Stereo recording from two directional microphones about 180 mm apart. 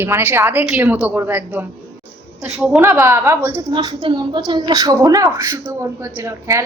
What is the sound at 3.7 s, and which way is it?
A woman's voice, 25° right (ahead or behind).